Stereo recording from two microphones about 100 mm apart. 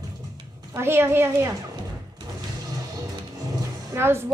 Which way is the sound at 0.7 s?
25° right (ahead or behind).